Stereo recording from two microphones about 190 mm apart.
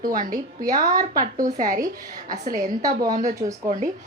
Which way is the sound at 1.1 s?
45° right (ahead or behind).